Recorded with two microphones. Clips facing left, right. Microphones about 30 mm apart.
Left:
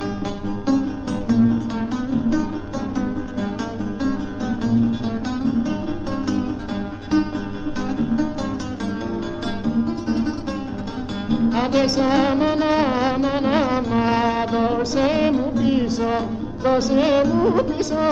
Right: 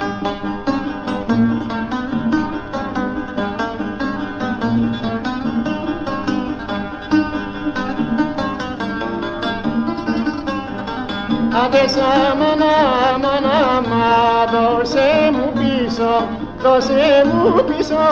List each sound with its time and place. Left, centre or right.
1.3 s music: right
4.0 s music: right
9.7 s music: right